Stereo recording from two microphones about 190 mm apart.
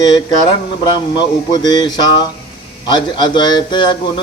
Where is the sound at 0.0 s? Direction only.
25° left (ahead or behind).